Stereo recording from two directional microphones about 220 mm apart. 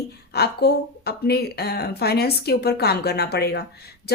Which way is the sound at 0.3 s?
45° left (ahead or behind).